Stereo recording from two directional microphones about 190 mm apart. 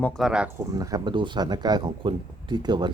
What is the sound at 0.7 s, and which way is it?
Speech, 20° right (ahead or behind).